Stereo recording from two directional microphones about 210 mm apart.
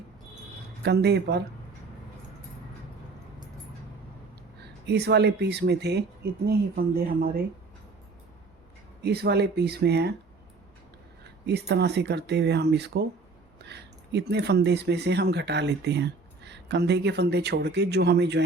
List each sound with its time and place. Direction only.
0.8 s speech: 50° right (ahead or behind)
4.6 s speech: 50° right (ahead or behind)
9.0 s speech: 50° right (ahead or behind)
11.2 s speech: 55° right (ahead or behind)